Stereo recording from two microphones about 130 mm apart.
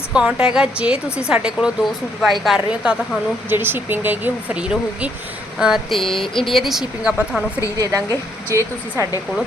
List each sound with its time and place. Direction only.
0.1 s speech: 5° right (ahead or behind)
3.5 s speech: 15° right (ahead or behind)
7.8 s a woman's voice: 25° right (ahead or behind)